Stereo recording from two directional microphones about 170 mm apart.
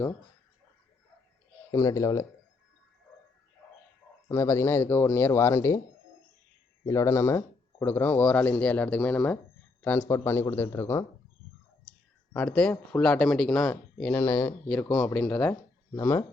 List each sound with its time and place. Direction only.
1.7 s speech: 20° left (ahead or behind)
4.3 s speech: 15° left (ahead or behind)
6.8 s speech: 15° left (ahead or behind)
12.3 s speech: 10° left (ahead or behind)